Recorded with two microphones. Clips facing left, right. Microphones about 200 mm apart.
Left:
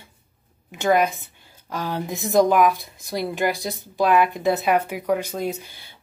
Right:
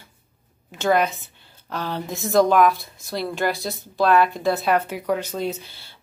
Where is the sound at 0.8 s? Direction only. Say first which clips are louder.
Left 1 dB; 10° left (ahead or behind).